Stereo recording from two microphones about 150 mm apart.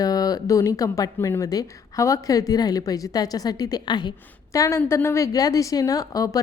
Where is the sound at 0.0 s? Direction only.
25° left (ahead or behind).